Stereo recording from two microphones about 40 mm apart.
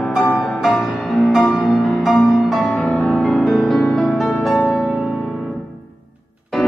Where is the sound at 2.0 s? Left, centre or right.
Centre.